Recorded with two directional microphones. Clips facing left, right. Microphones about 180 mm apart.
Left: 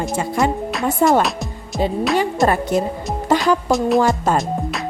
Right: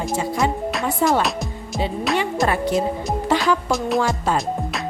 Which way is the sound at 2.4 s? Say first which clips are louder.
Left 3 dB; 45° left (ahead or behind).